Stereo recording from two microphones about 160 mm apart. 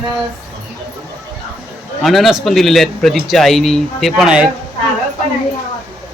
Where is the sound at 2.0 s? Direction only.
Centre (ahead or behind).